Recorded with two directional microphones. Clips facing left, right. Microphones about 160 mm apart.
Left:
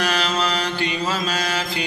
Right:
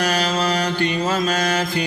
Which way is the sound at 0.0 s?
40° right (ahead or behind).